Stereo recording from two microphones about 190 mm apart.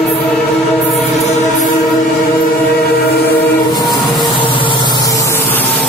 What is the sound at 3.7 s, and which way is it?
Vehicle, 20° left (ahead or behind).